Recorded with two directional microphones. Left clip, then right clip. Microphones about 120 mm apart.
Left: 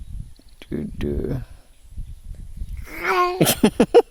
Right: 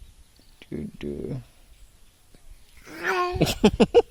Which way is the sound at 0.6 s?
50° left (ahead or behind).